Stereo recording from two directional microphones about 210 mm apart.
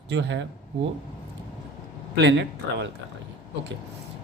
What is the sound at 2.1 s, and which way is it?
Speech, 55° right (ahead or behind).